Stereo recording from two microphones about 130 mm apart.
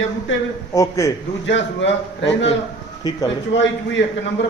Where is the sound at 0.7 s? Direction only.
25° left (ahead or behind).